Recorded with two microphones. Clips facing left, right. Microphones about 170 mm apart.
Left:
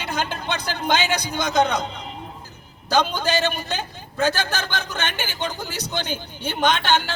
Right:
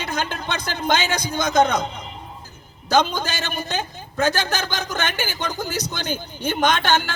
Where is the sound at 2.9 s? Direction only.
45° right (ahead or behind).